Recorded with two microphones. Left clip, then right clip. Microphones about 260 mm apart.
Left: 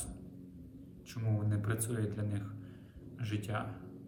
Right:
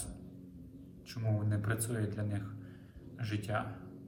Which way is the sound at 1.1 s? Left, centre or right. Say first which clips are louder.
Right 1 dB; centre.